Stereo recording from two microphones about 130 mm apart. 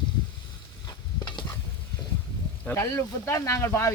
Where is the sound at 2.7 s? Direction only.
20° left (ahead or behind).